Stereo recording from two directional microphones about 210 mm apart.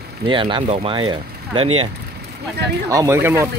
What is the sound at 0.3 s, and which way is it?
Speech, 25° right (ahead or behind).